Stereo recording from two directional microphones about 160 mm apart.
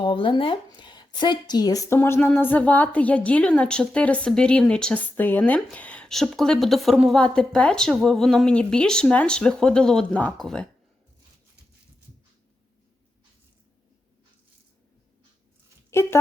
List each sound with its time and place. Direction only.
0.0 s speech: 30° left (ahead or behind); by 10.7 s 5° left (ahead or behind)
15.9 s speech: 15° left (ahead or behind)